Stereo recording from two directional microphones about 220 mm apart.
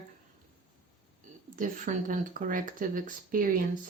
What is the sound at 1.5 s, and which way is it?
Speech, 35° right (ahead or behind).